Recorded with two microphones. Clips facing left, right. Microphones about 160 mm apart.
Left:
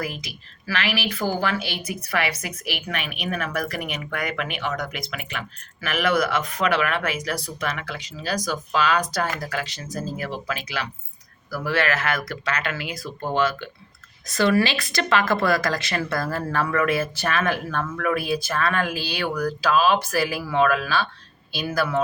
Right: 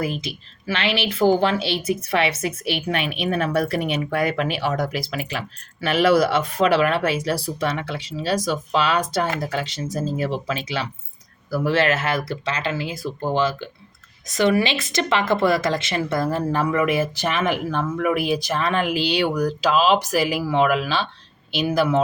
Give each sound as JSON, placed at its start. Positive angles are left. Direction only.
{"t": 0.0, "sound": "speech", "side_deg": -25}